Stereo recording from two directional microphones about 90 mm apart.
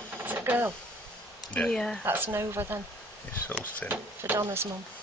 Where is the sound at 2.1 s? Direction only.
25° right (ahead or behind).